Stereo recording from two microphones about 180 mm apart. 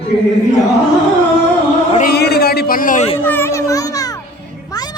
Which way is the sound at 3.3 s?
10° left (ahead or behind).